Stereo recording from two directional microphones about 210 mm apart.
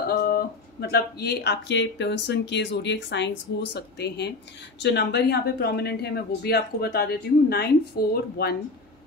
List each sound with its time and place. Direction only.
0.0 s speech: 45° left (ahead or behind)